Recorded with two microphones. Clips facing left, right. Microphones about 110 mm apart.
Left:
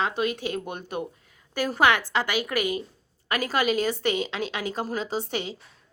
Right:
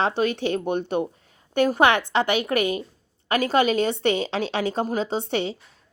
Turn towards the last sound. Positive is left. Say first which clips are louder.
# right 4 dB
turn(degrees=-30)  # may be behind; listen again after turning